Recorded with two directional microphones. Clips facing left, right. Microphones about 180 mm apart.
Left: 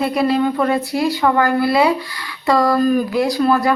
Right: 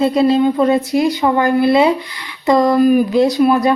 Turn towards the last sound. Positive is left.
turn(degrees=-20)  # may be behind; listen again after turning